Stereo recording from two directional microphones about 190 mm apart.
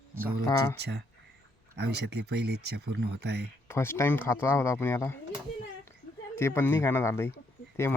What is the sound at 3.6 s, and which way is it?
Speech, 15° left (ahead or behind).